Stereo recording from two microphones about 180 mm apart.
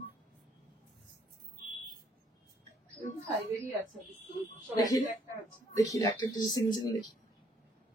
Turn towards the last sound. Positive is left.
turn(degrees=20)  # may be behind; listen again after turning